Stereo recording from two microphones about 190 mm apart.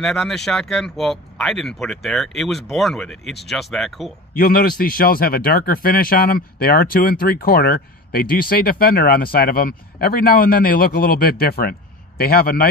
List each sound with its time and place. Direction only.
0.0 s speech: centre (ahead or behind)
4.3 s speech: 50° left (ahead or behind)